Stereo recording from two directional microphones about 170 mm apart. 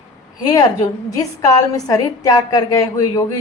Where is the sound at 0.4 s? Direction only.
20° left (ahead or behind).